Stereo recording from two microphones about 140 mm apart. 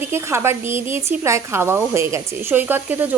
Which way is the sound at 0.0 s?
15° right (ahead or behind).